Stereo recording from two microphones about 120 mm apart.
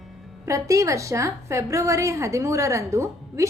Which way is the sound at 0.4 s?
25° right (ahead or behind).